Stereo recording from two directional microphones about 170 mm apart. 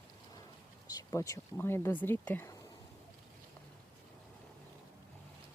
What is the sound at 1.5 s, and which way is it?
Speech, 15° left (ahead or behind).